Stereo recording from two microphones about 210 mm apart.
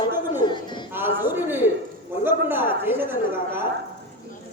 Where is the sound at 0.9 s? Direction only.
10° right (ahead or behind).